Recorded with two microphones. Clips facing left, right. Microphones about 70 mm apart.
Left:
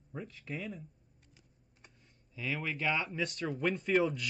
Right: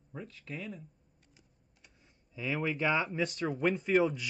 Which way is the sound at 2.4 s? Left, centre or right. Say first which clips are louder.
Right 4 dB; centre.